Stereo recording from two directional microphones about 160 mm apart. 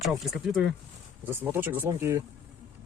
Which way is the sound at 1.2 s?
15° right (ahead or behind).